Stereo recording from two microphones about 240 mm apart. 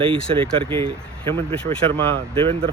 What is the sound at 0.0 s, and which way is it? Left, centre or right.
Speech, right.